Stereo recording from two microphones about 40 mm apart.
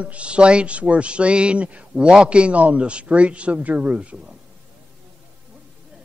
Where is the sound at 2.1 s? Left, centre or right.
Right.